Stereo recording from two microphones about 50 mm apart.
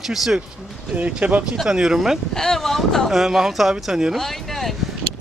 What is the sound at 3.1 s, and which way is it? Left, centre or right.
Speech, centre.